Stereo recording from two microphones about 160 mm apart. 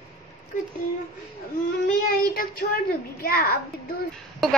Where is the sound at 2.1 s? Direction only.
70° left (ahead or behind).